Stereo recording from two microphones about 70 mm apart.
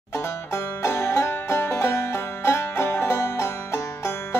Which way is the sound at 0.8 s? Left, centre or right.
Left.